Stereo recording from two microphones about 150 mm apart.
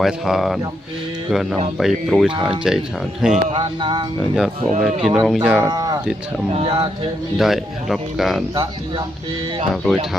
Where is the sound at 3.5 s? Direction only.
30° right (ahead or behind).